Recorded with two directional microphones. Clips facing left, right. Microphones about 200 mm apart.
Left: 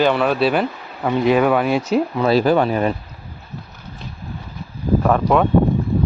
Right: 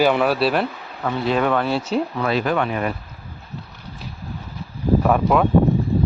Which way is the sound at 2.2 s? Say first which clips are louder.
Left 8 dB; 30° left (ahead or behind).